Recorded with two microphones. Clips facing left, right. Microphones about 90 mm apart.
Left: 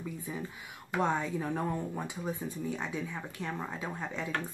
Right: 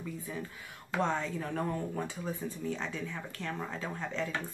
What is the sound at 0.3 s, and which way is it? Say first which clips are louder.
Speech: left 1 dB; 15° left (ahead or behind).